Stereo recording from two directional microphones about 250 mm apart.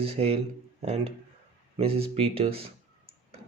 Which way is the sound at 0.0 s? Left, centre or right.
Right.